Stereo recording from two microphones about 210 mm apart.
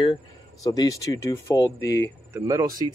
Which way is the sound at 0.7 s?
15° left (ahead or behind).